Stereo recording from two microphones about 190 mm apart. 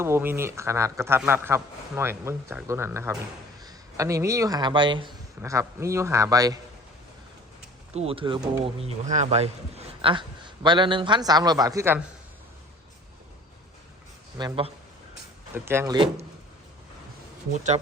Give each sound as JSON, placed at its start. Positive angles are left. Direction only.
{"t": 0.0, "sound": "speech", "side_deg": -10}
{"t": 7.9, "sound": "a man's voice", "side_deg": -30}
{"t": 14.3, "sound": "a man's voice", "side_deg": -25}
{"t": 15.5, "sound": "speech", "side_deg": -15}
{"t": 17.5, "sound": "speech", "side_deg": -40}